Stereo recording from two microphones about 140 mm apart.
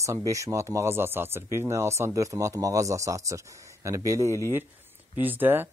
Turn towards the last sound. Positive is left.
turn(degrees=-15)  # may be behind; listen again after turning